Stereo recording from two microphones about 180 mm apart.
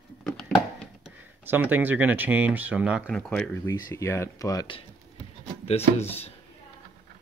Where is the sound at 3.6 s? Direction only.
15° left (ahead or behind).